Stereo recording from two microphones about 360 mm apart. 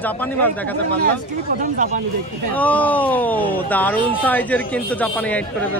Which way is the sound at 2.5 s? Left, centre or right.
Centre.